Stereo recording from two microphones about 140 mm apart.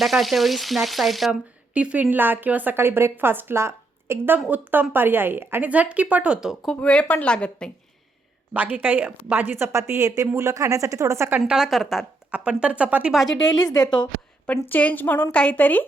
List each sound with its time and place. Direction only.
0.0 s frying: centre (ahead or behind)
6.7 s speech: 10° left (ahead or behind)
8.5 s frying: 10° right (ahead or behind)
9.3 s a woman's voice: 15° right (ahead or behind)
11.3 s a woman's voice: 5° right (ahead or behind)
12.5 s frying: 10° right (ahead or behind)
13.5 s a woman's voice: 30° left (ahead or behind)
14.4 s speech: 10° left (ahead or behind)